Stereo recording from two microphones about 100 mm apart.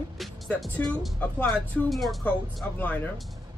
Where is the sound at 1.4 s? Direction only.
5° left (ahead or behind).